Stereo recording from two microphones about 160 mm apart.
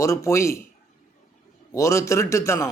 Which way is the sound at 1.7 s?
20° left (ahead or behind).